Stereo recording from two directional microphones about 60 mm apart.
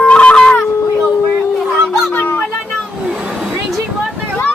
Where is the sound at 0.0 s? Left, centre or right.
Centre.